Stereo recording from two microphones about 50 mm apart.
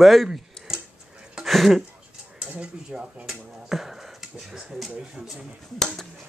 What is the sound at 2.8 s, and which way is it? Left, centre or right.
Speech, centre.